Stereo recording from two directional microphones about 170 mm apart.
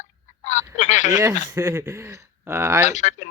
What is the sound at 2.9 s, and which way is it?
Speech, 45° left (ahead or behind).